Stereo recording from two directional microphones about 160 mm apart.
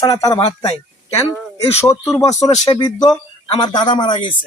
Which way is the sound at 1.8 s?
20° left (ahead or behind).